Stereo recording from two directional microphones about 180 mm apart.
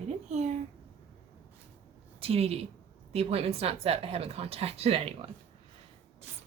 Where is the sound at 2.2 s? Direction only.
35° right (ahead or behind).